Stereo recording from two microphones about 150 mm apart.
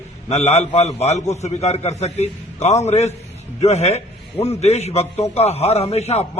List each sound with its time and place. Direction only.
0.3 s a man's voice: 45° left (ahead or behind)